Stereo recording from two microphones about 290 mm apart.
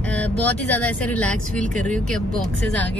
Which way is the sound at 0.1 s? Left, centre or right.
Centre.